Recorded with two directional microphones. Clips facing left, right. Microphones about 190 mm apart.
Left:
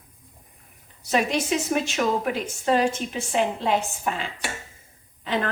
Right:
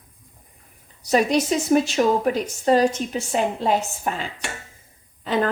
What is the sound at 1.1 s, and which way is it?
Speech, 40° right (ahead or behind).